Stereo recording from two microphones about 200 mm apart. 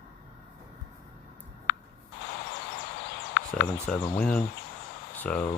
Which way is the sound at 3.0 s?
60° left (ahead or behind).